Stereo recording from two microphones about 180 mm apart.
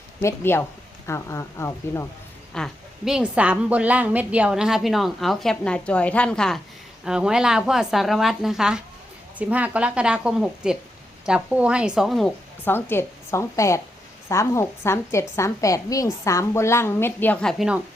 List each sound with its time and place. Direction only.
0.2 s a woman's voice: 15° left (ahead or behind)
2.5 s a woman's voice: centre (ahead or behind)
12.6 s a woman's voice: 10° left (ahead or behind)